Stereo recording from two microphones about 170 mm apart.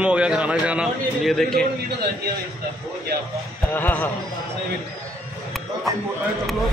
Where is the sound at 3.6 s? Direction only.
10° left (ahead or behind).